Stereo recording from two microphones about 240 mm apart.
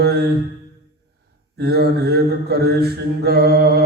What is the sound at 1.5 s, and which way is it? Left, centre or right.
Mantra, right.